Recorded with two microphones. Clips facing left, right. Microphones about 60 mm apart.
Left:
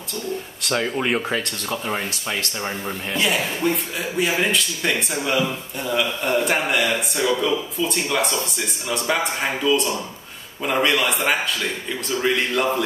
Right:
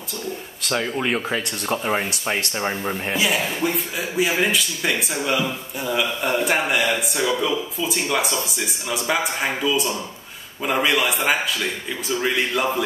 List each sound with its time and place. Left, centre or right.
0.6 s speech: centre
1.7 s speech: centre
2.7 s speech: centre
3.2 s speech: centre